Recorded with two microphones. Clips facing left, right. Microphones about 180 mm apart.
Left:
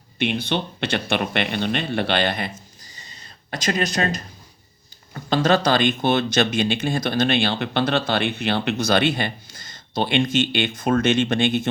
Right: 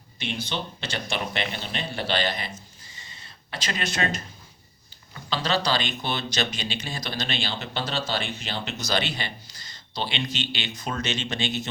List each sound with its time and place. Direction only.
0.2 s speech: 60° left (ahead or behind)
3.5 s speech: 45° left (ahead or behind)
5.1 s speech: 50° left (ahead or behind)